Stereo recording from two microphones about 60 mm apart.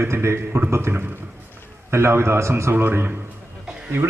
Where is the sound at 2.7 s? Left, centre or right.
Right.